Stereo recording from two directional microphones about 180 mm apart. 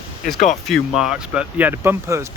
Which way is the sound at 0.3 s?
45° left (ahead or behind).